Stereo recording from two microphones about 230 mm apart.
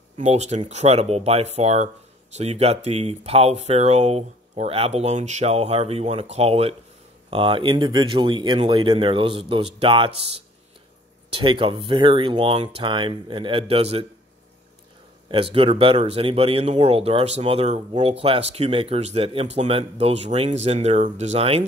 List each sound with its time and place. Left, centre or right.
0.2 s speech: right
15.2 s speech: right